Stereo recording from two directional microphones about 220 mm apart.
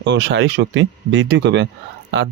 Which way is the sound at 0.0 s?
55° right (ahead or behind).